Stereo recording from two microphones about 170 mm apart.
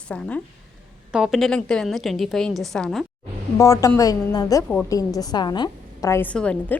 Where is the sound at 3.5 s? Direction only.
20° left (ahead or behind).